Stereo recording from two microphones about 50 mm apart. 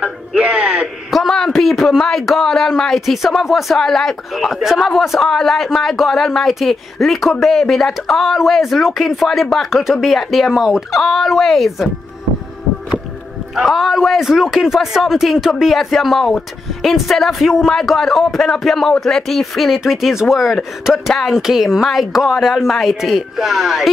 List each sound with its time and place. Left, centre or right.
0.4 s a sound: right
1.1 s a sound: centre
2.0 s speech: centre
3.7 s speech: centre
11.0 s speech: centre
13.7 s speech: centre
21.1 s speech: centre
21.4 s speech: centre